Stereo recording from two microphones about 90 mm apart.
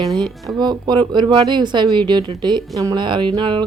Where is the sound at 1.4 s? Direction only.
55° right (ahead or behind).